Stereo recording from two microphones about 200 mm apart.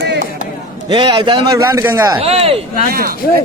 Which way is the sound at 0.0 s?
55° right (ahead or behind).